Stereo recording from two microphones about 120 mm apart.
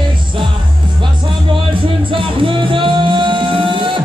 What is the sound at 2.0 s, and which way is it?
Music, 45° right (ahead or behind).